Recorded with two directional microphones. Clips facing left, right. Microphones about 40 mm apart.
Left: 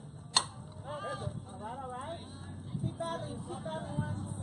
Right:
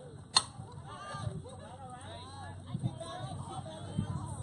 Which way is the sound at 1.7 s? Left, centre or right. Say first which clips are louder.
Left 7 dB; left.